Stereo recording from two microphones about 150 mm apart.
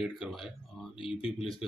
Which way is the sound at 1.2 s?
35° left (ahead or behind).